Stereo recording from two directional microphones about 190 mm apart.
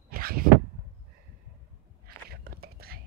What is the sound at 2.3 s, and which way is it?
Whispering, 55° right (ahead or behind).